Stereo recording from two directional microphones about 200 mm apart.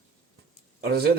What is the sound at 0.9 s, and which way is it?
Speech, 55° right (ahead or behind).